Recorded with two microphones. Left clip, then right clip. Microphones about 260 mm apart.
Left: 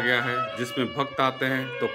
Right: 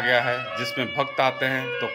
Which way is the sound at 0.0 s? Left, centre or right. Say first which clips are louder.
Right 2 dB; centre.